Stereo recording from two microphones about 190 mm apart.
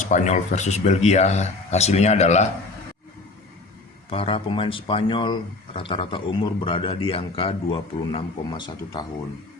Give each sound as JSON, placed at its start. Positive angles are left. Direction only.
{"t": 0.0, "sound": "speech", "side_deg": 40}
{"t": 4.1, "sound": "speech", "side_deg": 30}